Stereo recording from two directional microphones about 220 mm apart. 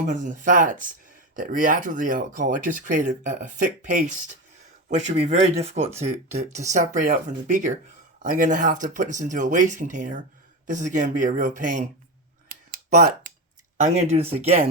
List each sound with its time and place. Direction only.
0.1 s speech: 35° right (ahead or behind)
5.1 s speech: 30° right (ahead or behind)
12.5 s a sound: 40° right (ahead or behind)
13.8 s speech: 30° right (ahead or behind)